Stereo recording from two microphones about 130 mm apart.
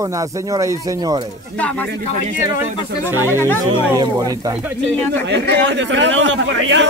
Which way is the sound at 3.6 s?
30° right (ahead or behind).